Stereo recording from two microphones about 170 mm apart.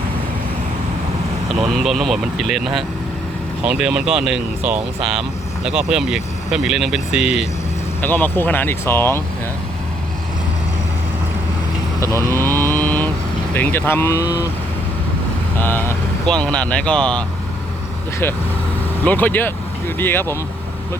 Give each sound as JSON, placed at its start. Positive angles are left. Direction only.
{"t": 1.5, "sound": "speech", "side_deg": 0}
{"t": 8.0, "sound": "speech", "side_deg": 10}
{"t": 12.0, "sound": "speech", "side_deg": -20}
{"t": 12.5, "sound": "mantra", "side_deg": 10}
{"t": 13.5, "sound": "speech", "side_deg": 10}
{"t": 15.6, "sound": "speech", "side_deg": 10}
{"t": 19.0, "sound": "speech", "side_deg": 10}